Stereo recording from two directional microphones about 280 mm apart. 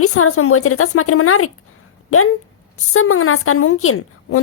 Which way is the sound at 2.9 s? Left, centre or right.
Left.